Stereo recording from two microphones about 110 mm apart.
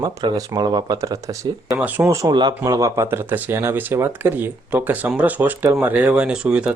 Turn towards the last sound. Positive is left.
turn(degrees=-10)  # may be behind; listen again after turning